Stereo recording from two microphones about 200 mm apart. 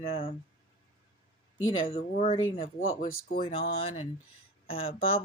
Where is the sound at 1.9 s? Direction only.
30° left (ahead or behind).